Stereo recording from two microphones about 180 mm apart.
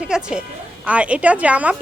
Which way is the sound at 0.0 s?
5° right (ahead or behind).